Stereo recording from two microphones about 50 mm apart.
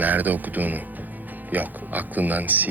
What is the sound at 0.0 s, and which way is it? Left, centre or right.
A man's voice, right.